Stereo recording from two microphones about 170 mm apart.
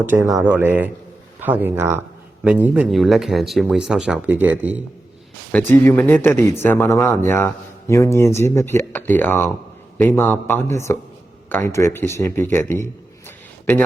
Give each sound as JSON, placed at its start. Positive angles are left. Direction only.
{"t": 0.0, "sound": "speech", "side_deg": -10}
{"t": 5.5, "sound": "speech", "side_deg": 10}
{"t": 12.5, "sound": "a sound", "side_deg": 15}